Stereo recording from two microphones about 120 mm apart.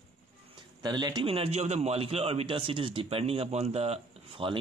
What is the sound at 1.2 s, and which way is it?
Speech, 50° right (ahead or behind).